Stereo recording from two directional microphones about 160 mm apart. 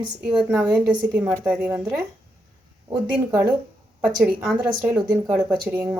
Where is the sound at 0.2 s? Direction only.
5° right (ahead or behind).